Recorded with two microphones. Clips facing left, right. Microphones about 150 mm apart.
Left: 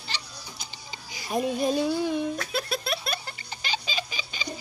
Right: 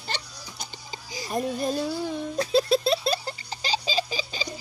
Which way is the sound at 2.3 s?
30° right (ahead or behind).